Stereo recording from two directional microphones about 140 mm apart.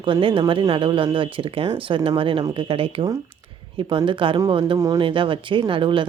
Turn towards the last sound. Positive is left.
turn(degrees=-35)  # may be behind; listen again after turning